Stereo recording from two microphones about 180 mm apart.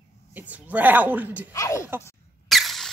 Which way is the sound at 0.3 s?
10° right (ahead or behind).